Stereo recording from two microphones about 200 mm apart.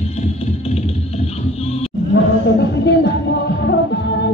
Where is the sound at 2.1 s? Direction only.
60° left (ahead or behind).